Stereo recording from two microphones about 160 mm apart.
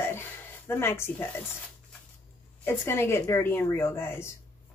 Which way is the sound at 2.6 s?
15° left (ahead or behind).